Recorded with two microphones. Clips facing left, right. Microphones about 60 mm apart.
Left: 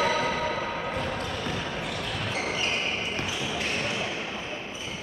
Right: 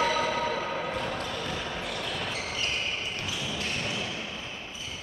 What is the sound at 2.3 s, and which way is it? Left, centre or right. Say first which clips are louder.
Basketball bounce: left 4 dB; left.